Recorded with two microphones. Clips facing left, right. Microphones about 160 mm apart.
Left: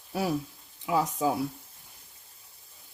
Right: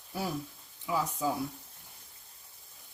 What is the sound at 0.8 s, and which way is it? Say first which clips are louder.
Speech: left 5 dB; 85° left.